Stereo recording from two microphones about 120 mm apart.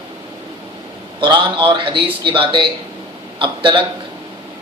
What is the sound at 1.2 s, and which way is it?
A man's voice, 40° right (ahead or behind).